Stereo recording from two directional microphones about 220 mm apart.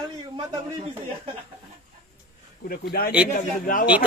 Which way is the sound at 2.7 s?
45° left (ahead or behind).